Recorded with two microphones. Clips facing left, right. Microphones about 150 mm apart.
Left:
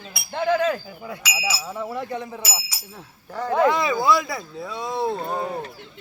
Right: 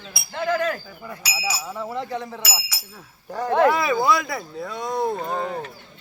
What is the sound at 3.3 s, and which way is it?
A man's voice, 15° right (ahead or behind).